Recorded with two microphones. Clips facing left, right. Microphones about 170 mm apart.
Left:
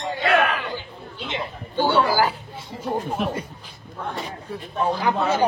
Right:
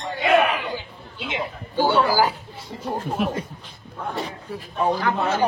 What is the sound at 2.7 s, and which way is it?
Speech, centre (ahead or behind).